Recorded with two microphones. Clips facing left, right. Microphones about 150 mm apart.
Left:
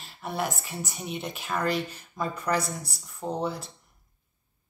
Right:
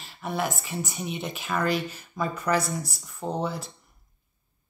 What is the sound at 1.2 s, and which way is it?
Speech, centre (ahead or behind).